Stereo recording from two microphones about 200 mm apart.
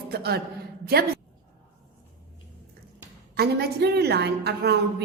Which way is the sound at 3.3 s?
55° right (ahead or behind).